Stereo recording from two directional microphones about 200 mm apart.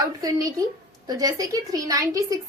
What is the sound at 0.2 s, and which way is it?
A woman's voice, 15° right (ahead or behind).